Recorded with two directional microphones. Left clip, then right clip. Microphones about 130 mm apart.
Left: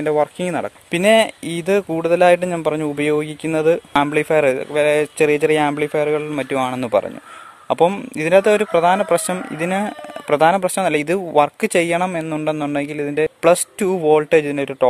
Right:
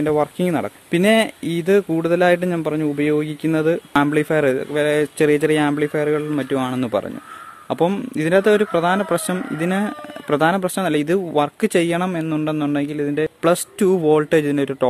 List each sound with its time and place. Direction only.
0.0 s speech: 15° left (ahead or behind)
13.7 s speech: 15° left (ahead or behind)